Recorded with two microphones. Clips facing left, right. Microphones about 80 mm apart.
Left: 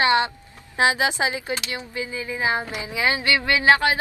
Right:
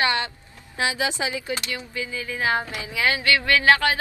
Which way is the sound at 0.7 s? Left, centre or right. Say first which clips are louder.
Left 5 dB; left.